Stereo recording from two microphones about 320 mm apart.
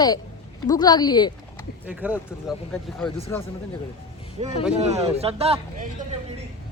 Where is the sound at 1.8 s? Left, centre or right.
Centre.